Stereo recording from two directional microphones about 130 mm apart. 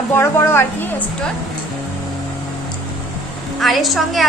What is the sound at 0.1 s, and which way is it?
Speech, 20° left (ahead or behind).